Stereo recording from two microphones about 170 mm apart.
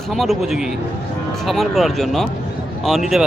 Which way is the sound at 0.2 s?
Centre (ahead or behind).